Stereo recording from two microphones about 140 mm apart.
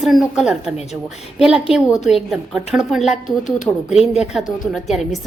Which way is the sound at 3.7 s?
20° left (ahead or behind).